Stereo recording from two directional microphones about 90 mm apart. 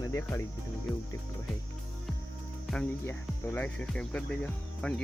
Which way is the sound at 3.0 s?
20° left (ahead or behind).